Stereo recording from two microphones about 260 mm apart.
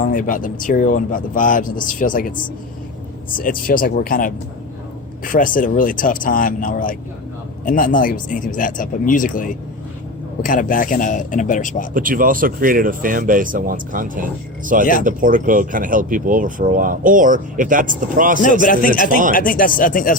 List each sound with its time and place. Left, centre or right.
0.0 s speech: left
11.9 s speech: right
18.6 s speech: left